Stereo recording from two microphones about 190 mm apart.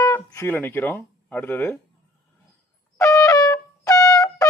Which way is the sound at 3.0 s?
15° left (ahead or behind).